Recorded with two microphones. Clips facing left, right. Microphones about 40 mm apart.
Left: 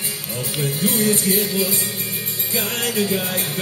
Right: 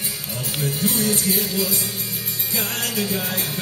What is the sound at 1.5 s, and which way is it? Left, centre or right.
Music, left.